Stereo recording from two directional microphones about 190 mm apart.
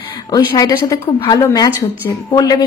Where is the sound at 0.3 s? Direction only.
20° left (ahead or behind).